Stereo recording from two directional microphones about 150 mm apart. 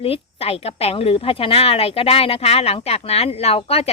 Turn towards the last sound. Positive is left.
turn(degrees=40)  # may be behind; listen again after turning